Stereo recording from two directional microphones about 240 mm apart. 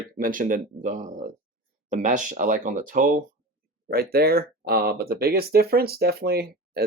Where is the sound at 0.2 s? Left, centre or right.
Right.